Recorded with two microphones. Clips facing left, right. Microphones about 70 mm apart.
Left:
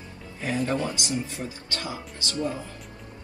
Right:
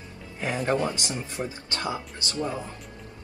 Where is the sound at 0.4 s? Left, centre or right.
Right.